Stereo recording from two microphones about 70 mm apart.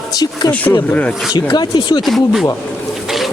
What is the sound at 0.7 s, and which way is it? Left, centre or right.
Speech, left.